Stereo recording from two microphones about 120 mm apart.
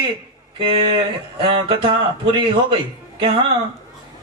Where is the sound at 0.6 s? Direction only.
50° right (ahead or behind).